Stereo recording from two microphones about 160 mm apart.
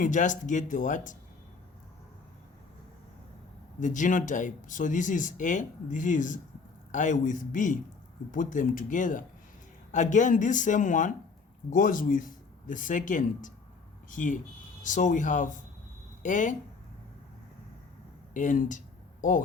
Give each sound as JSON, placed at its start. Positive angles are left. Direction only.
{"t": 0.0, "sound": "speech", "side_deg": 55}
{"t": 3.8, "sound": "speech", "side_deg": 50}
{"t": 18.3, "sound": "speech", "side_deg": 55}